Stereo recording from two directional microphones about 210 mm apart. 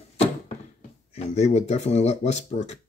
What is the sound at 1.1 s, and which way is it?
Speech, 30° left (ahead or behind).